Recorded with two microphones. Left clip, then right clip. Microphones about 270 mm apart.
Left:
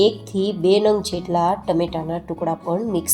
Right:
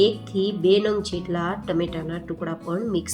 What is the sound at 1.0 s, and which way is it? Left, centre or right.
Speech, centre.